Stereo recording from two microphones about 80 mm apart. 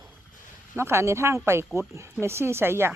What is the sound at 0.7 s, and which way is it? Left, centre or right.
Speech, right.